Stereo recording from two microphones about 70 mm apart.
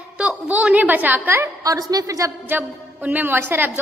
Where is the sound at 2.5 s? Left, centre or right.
Right.